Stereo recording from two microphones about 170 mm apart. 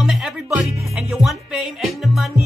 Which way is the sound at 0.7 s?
15° right (ahead or behind).